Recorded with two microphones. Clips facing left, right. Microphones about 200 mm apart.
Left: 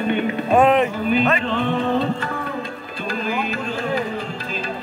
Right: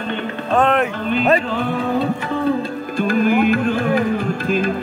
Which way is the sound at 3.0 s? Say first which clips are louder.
Right 9 dB; 55° right (ahead or behind).